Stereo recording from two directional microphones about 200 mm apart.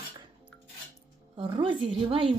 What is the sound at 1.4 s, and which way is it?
Speech, 25° right (ahead or behind).